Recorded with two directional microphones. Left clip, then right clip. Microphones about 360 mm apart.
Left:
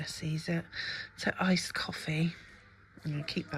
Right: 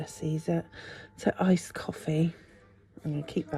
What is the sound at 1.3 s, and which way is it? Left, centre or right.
Speech, right.